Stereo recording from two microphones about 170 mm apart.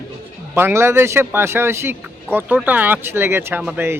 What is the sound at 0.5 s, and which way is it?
A man's voice, 15° right (ahead or behind).